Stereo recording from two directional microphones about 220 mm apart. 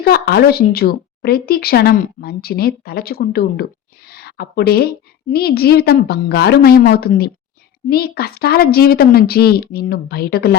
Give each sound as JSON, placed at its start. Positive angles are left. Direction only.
{"t": 0.0, "sound": "a woman's voice", "side_deg": 45}